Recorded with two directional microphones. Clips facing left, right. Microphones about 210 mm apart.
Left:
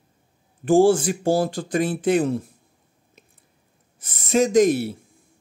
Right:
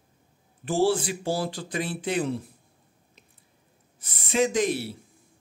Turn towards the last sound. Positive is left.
turn(degrees=45)  # may be behind; listen again after turning